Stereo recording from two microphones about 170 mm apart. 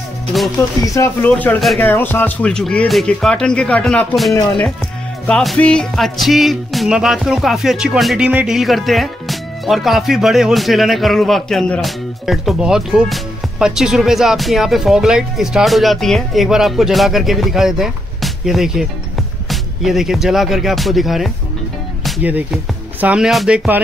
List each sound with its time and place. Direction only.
0.8 s speech: 15° left (ahead or behind)
4.3 s speech: 20° left (ahead or behind)
5.2 s music: 5° left (ahead or behind)
22.0 s speech: 5° right (ahead or behind)